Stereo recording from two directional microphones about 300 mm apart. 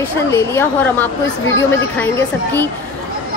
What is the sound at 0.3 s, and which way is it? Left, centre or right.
A woman's voice, centre.